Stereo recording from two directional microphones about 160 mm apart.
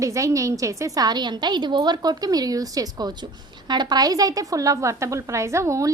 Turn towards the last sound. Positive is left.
turn(degrees=-20)  # may be behind; listen again after turning